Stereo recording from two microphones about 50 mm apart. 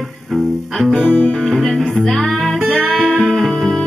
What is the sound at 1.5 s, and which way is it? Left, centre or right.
Music, centre.